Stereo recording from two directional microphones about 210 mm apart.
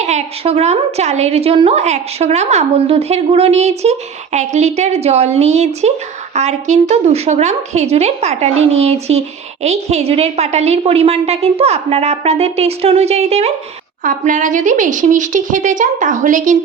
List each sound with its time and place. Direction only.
0.0 s a woman's voice: 30° right (ahead or behind)